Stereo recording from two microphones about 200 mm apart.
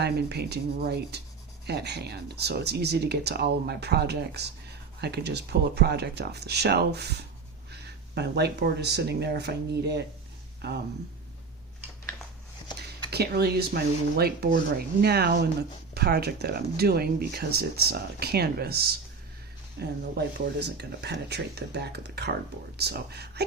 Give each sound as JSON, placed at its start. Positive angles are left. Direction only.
{"t": 0.0, "sound": "speech", "side_deg": -55}
{"t": 13.1, "sound": "speech", "side_deg": -55}